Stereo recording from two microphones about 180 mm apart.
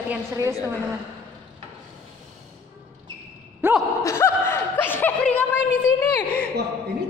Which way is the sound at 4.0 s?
15° left (ahead or behind).